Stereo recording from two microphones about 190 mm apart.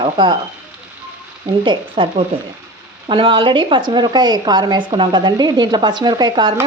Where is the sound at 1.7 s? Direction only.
25° right (ahead or behind).